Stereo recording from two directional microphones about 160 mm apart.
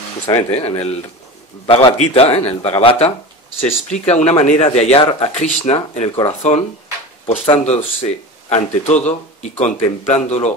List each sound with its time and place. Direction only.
0.3 s a man's voice: 40° left (ahead or behind)
7.2 s speech: 40° left (ahead or behind)